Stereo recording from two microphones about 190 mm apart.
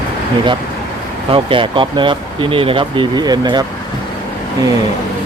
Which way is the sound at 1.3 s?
25° right (ahead or behind).